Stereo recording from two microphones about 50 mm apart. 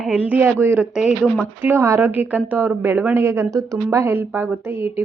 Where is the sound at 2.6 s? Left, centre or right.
Right.